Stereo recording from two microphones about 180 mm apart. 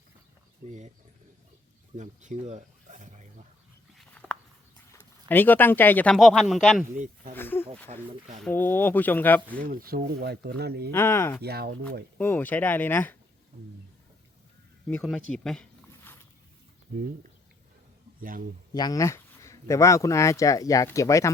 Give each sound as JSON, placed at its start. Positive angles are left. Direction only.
{"t": 0.6, "sound": "speech", "side_deg": -40}
{"t": 2.0, "sound": "a sound", "side_deg": -40}
{"t": 4.2, "sound": "a sound", "side_deg": 10}
{"t": 4.9, "sound": "speech", "side_deg": 10}
{"t": 7.3, "sound": "a sound", "side_deg": 10}
{"t": 7.9, "sound": "speech", "side_deg": -35}
{"t": 8.4, "sound": "speech", "side_deg": 10}
{"t": 9.6, "sound": "speech", "side_deg": -55}
{"t": 10.9, "sound": "speech", "side_deg": 15}
{"t": 11.4, "sound": "speech", "side_deg": -60}
{"t": 12.1, "sound": "speech", "side_deg": 10}
{"t": 14.8, "sound": "speech", "side_deg": 5}
{"t": 18.2, "sound": "speech", "side_deg": -50}
{"t": 18.7, "sound": "speech", "side_deg": 20}